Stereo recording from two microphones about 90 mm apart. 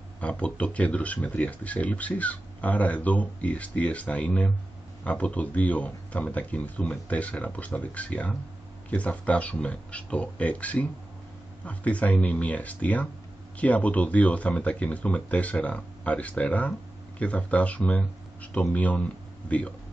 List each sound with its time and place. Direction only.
0.2 s speech: 15° left (ahead or behind)